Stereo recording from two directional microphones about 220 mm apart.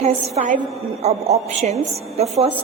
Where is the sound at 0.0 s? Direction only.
30° right (ahead or behind).